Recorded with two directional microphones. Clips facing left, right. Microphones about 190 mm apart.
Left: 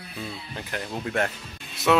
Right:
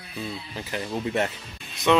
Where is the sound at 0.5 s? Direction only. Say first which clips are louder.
Right 2 dB; 5° right (ahead or behind).